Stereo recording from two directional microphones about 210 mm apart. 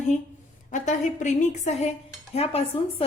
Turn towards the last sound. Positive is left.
turn(degrees=30)  # may be behind; listen again after turning